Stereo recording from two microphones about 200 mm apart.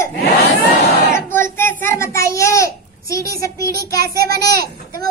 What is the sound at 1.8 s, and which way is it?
A child's voice, 15° left (ahead or behind).